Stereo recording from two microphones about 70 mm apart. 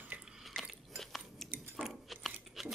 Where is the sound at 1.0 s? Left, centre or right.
Centre.